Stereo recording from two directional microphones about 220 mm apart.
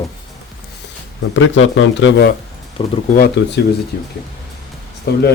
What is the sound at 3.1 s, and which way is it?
Speech, 45° left (ahead or behind).